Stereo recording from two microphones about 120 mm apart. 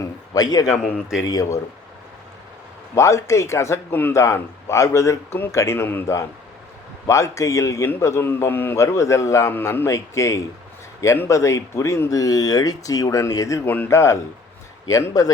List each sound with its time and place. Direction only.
0.0 s a sound: 30° left (ahead or behind)
0.6 s a man's voice: centre (ahead or behind)
1.3 s a man's voice: 30° left (ahead or behind)
2.9 s a man's voice: 25° left (ahead or behind)
13.7 s a man's voice: 15° left (ahead or behind)